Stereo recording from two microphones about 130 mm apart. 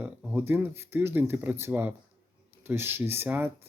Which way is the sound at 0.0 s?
10° right (ahead or behind).